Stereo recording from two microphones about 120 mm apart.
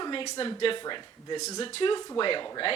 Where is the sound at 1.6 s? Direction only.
50° left (ahead or behind).